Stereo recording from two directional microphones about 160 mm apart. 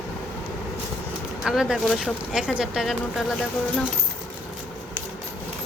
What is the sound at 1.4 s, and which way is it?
Speech, 5° right (ahead or behind).